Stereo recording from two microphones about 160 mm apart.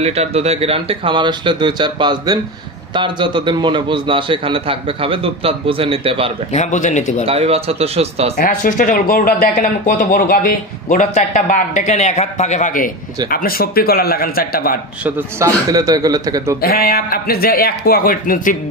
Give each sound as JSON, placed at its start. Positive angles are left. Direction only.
{"t": 0.0, "sound": "a man's voice", "side_deg": -40}
{"t": 6.5, "sound": "speech", "side_deg": 50}
{"t": 7.2, "sound": "a man's voice", "side_deg": -40}
{"t": 8.4, "sound": "speech", "side_deg": 55}
{"t": 13.3, "sound": "a man's voice", "side_deg": 65}
{"t": 15.0, "sound": "speech", "side_deg": -15}
{"t": 16.6, "sound": "a man's voice", "side_deg": 65}